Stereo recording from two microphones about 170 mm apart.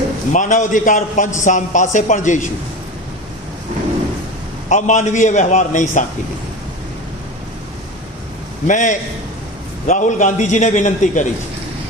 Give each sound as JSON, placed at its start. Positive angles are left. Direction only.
{"t": 0.3, "sound": "a man's voice", "side_deg": 50}
{"t": 4.7, "sound": "a man's voice", "side_deg": 45}
{"t": 8.6, "sound": "a man's voice", "side_deg": 45}